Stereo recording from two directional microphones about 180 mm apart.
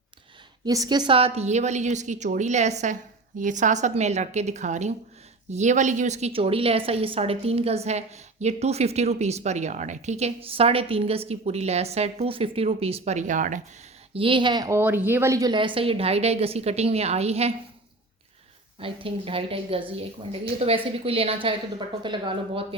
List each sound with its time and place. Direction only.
0.6 s a woman's voice: 20° right (ahead or behind); by 13.6 s 45° right (ahead or behind)
14.1 s a woman's voice: 30° right (ahead or behind)
18.8 s a woman's voice: 30° right (ahead or behind)